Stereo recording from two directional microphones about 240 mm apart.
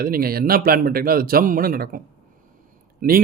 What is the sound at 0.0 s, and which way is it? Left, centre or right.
Speech, right.